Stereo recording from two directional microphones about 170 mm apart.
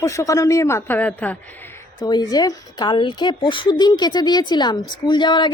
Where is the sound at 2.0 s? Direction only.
25° left (ahead or behind).